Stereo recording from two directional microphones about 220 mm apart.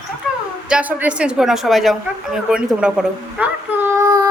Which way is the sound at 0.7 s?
5° right (ahead or behind).